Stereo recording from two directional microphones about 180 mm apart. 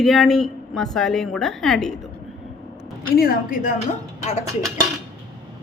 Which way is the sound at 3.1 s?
55° left (ahead or behind).